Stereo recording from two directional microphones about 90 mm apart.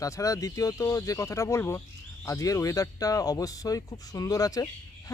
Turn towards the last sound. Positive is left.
turn(degrees=45)  # may be behind; listen again after turning